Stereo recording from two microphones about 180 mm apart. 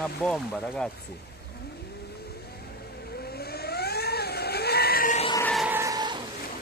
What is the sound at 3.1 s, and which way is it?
Vehicle, 60° left (ahead or behind).